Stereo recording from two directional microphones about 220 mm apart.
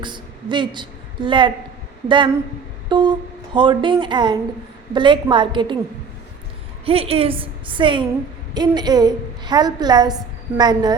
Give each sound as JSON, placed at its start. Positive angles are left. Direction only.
{"t": 0.0, "sound": "a woman's voice", "side_deg": -20}
{"t": 6.8, "sound": "a woman's voice", "side_deg": -25}